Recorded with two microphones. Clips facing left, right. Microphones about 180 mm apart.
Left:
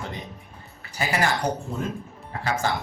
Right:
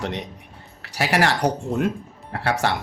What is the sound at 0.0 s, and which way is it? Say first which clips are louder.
Speech: right 6 dB; 75° right (ahead or behind).